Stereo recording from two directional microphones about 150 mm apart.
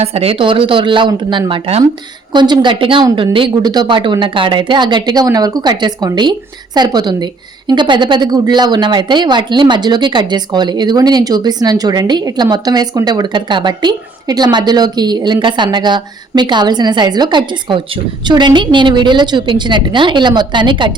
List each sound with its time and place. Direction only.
0.0 s a woman's voice: 45° right (ahead or behind)